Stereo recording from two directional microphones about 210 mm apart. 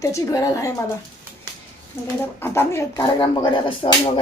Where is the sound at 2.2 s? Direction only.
10° left (ahead or behind).